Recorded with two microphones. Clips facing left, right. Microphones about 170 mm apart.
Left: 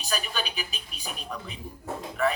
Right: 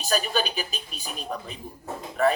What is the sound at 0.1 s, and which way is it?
A man's voice, 40° right (ahead or behind).